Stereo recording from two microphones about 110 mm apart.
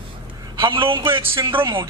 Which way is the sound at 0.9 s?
50° right (ahead or behind).